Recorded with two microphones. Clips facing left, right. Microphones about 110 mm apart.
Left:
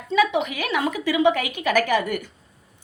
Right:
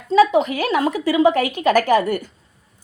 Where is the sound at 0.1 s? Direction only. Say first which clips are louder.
Right 6 dB; 35° right (ahead or behind).